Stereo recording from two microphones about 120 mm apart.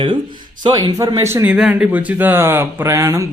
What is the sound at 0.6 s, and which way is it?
Speech, 35° right (ahead or behind).